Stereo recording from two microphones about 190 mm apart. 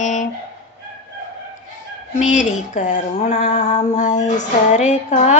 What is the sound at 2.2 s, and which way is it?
Speech, 40° left (ahead or behind).